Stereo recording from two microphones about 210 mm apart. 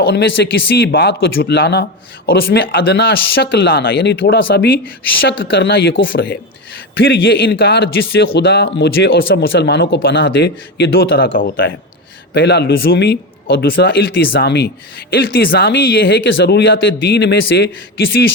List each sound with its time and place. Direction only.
0.0 s speech: 50° left (ahead or behind)